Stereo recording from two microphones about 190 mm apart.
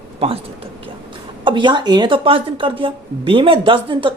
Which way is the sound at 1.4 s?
25° right (ahead or behind).